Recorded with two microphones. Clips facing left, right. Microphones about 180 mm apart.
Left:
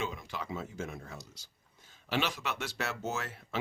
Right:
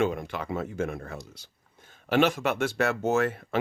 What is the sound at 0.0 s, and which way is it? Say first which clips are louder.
A man's voice: right 10 dB; 60° right (ahead or behind).